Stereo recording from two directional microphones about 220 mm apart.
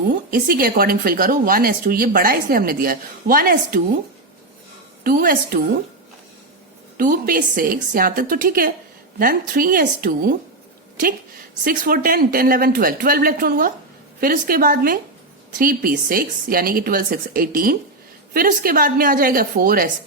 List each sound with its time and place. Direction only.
0.3 s speech: 40° right (ahead or behind)
5.0 s speech: 40° right (ahead or behind)
6.9 s speech: 40° right (ahead or behind)
11.6 s speech: 40° right (ahead or behind)